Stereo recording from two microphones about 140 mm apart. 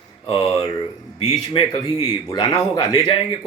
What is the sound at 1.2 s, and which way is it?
Speech, 30° left (ahead or behind).